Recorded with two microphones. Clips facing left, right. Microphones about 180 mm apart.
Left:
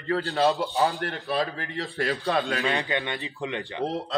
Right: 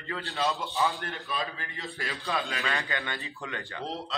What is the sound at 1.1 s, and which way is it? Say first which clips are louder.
A man's voice: left 7 dB; 50° left (ahead or behind).